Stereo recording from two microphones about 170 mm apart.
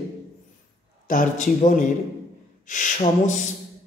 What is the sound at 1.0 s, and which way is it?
Speech, 50° left (ahead or behind).